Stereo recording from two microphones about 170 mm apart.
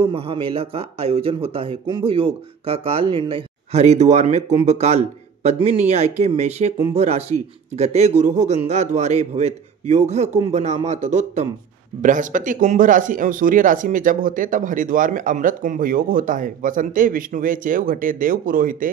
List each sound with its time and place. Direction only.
0.0 s speech: 35° right (ahead or behind); by 18.9 s 55° right (ahead or behind)